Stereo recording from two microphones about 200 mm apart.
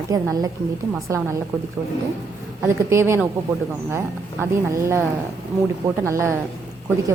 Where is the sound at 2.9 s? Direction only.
10° right (ahead or behind).